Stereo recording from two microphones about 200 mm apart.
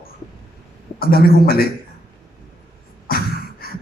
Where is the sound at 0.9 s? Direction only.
50° left (ahead or behind).